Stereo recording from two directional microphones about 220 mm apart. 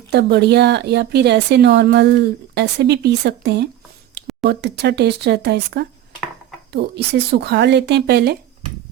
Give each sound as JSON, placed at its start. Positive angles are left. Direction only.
{"t": 0.1, "sound": "a woman's voice", "side_deg": -50}